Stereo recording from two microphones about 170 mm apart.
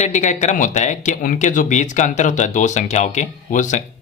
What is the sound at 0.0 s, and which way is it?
Speech, 45° left (ahead or behind).